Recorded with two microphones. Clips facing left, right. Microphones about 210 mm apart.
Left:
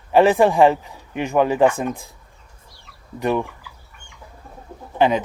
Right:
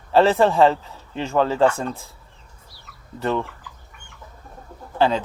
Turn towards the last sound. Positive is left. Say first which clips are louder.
# left 2 dB
turn(degrees=15)  # may be behind; listen again after turning